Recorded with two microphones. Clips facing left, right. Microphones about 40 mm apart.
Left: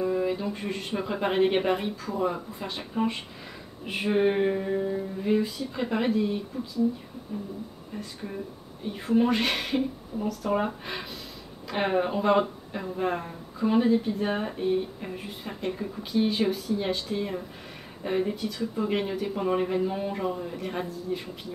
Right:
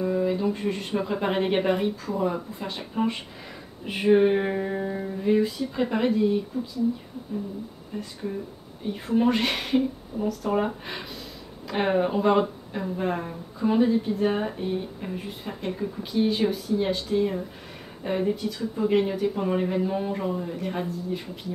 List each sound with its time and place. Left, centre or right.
0.0 s speech: centre
4.5 s music: centre
4.7 s music: right
5.2 s speech: centre
7.9 s music: centre
8.8 s speech: centre